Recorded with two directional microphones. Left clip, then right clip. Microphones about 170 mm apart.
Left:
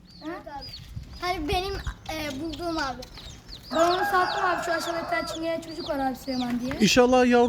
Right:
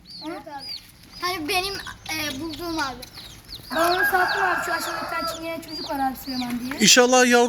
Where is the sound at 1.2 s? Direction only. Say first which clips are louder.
Right 3 dB; 55° left (ahead or behind).